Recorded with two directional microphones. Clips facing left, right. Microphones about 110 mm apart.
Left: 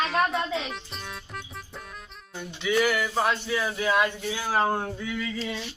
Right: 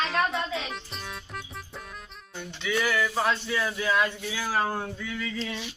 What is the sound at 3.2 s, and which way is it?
Speech, 15° left (ahead or behind).